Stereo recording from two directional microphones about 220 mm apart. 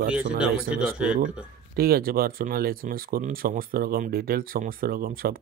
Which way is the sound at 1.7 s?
45° right (ahead or behind).